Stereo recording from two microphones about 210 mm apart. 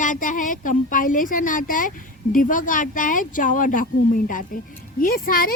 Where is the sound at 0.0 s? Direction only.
40° left (ahead or behind).